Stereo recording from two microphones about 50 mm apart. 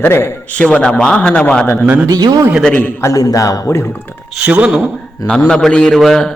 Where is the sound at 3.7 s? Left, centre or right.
Left.